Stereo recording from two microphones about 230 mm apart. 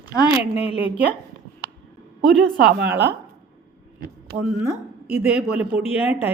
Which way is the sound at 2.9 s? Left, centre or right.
Centre.